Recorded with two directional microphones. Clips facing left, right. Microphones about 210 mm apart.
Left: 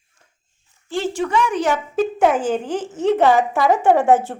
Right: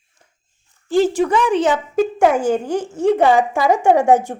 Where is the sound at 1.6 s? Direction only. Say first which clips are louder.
Right 3 dB; 20° right (ahead or behind).